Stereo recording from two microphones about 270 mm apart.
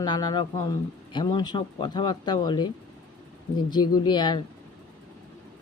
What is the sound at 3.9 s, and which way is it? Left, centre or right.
Speech, centre.